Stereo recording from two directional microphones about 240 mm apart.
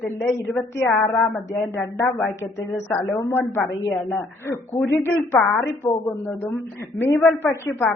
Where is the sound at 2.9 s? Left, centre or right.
Centre.